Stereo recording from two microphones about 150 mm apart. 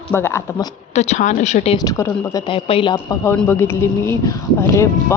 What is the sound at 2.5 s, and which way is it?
Speech, 40° left (ahead or behind).